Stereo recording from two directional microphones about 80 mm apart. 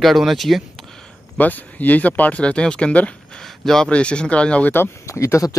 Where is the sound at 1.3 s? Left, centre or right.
Centre.